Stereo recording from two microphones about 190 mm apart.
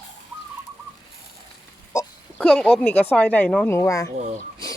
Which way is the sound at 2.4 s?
5° left (ahead or behind).